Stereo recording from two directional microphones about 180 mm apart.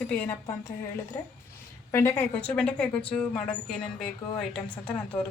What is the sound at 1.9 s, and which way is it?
Speech, 15° left (ahead or behind).